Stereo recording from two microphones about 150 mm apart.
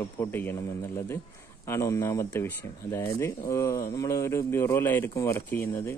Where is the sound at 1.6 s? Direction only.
20° left (ahead or behind).